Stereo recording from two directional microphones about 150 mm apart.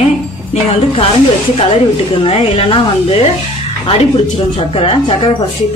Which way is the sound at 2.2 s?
40° left (ahead or behind).